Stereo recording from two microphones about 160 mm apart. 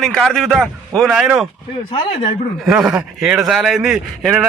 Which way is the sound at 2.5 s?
Centre (ahead or behind).